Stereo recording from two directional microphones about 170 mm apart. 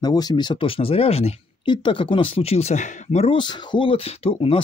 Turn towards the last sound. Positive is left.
turn(degrees=35)  # may be behind; listen again after turning